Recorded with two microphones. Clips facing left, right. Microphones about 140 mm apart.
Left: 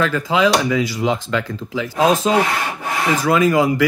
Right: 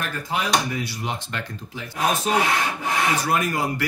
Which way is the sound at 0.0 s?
90° left.